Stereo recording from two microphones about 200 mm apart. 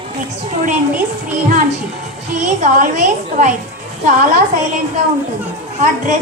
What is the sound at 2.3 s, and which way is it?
A woman's voice, 40° right (ahead or behind).